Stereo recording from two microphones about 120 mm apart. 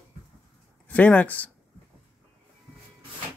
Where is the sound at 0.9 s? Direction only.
10° left (ahead or behind).